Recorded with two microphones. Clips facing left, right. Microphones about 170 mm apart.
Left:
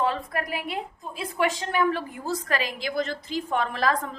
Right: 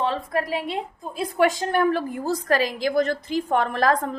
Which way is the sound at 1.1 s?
40° right (ahead or behind).